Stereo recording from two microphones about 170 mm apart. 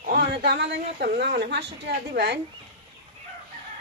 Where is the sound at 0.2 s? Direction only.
70° right (ahead or behind).